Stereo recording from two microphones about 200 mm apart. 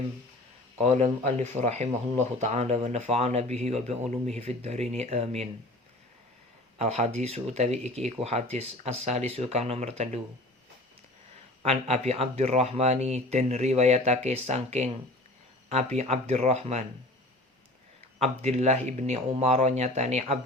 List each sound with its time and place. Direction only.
0.8 s speech: 35° right (ahead or behind)
6.7 s speech: 35° right (ahead or behind)
11.6 s speech: 30° right (ahead or behind)
18.2 s speech: 35° right (ahead or behind)